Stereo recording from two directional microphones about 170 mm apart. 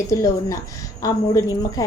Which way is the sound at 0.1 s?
20° left (ahead or behind).